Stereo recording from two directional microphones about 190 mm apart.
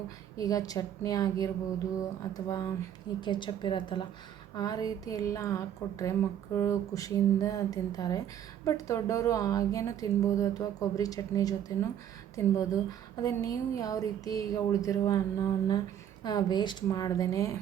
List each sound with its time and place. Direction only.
0.3 s a woman's voice: 20° left (ahead or behind)